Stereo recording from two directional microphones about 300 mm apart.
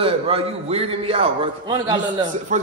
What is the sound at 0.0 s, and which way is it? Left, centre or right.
A man's voice, centre.